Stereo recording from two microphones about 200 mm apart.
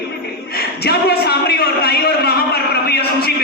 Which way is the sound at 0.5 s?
50° left (ahead or behind).